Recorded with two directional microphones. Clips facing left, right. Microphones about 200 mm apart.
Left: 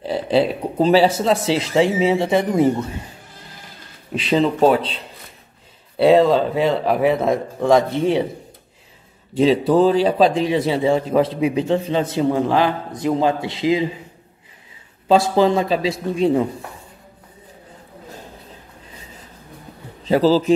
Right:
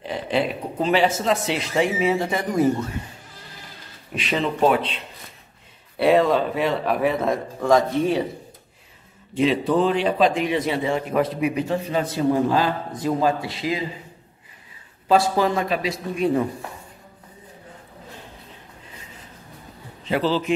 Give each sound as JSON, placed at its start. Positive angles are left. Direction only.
{"t": 0.0, "sound": "speech", "side_deg": 35}
{"t": 4.1, "sound": "a man's voice", "side_deg": 30}
{"t": 9.3, "sound": "a man's voice", "side_deg": 35}
{"t": 15.0, "sound": "a man's voice", "side_deg": 25}
{"t": 20.1, "sound": "speech", "side_deg": 35}